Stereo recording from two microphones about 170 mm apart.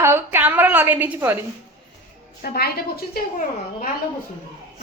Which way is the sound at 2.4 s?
65° left (ahead or behind).